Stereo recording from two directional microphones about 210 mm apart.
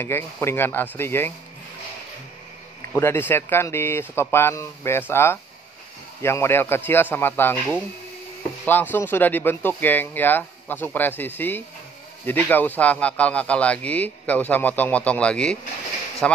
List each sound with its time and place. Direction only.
0.0 s a man's voice: 10° left (ahead or behind)
3.0 s a man's voice: 10° left (ahead or behind)
8.6 s a man's voice: 10° left (ahead or behind)